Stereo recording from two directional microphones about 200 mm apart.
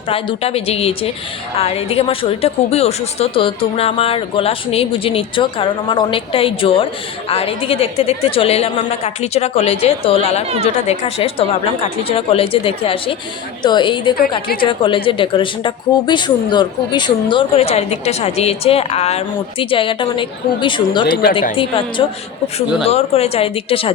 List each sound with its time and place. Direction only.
0.1 s a woman's voice: 30° left (ahead or behind)
21.1 s speech: 50° left (ahead or behind)
21.5 s a woman's voice: 25° left (ahead or behind)